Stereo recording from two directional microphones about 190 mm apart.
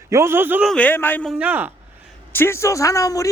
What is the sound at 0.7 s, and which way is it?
Speech, 10° left (ahead or behind).